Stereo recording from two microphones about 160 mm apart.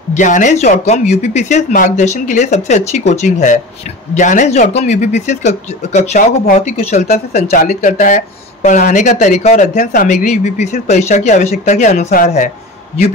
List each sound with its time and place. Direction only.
0.1 s speech: 50° left (ahead or behind)